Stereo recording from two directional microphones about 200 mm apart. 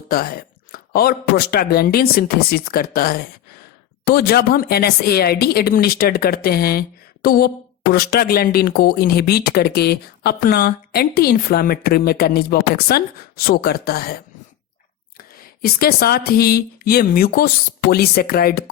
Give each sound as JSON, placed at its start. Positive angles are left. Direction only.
{"t": 0.1, "sound": "speech", "side_deg": 50}
{"t": 15.2, "sound": "speech", "side_deg": 50}